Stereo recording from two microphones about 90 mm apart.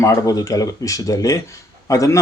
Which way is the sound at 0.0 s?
35° left (ahead or behind).